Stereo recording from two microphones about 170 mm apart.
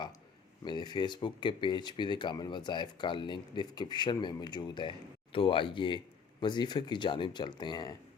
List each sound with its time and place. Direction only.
0.6 s speech: 25° left (ahead or behind)